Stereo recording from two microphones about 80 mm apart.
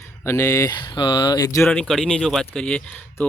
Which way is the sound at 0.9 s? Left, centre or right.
Left.